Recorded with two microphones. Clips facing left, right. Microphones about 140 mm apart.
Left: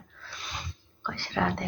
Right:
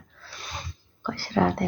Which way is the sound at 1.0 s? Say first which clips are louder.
Right 5 dB; 40° right (ahead or behind).